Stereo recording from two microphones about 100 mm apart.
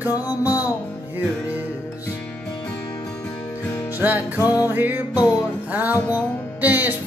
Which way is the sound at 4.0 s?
20° right (ahead or behind).